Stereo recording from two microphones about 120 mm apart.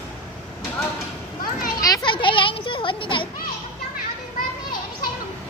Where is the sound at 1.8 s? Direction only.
35° left (ahead or behind).